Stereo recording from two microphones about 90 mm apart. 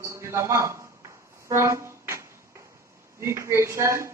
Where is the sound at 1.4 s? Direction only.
35° right (ahead or behind).